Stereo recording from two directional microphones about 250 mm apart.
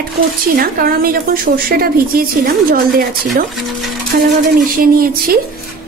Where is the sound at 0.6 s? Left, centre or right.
Right.